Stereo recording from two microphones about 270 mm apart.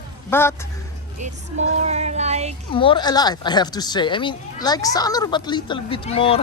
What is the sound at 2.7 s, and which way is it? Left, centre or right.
Speech, centre.